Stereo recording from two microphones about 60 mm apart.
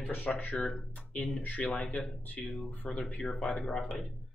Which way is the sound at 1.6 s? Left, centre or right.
Centre.